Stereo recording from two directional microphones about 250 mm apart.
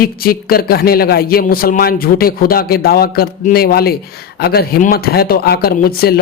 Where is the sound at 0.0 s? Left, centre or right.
Left.